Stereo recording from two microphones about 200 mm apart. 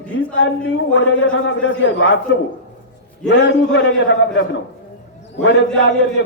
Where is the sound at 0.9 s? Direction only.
75° left (ahead or behind).